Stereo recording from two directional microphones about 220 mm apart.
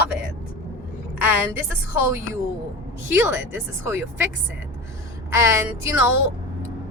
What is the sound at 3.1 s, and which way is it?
Speech, 10° right (ahead or behind).